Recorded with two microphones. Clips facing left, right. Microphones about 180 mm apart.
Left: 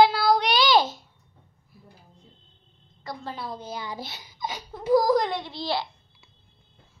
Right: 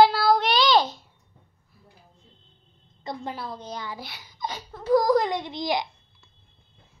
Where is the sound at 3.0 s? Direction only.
20° right (ahead or behind).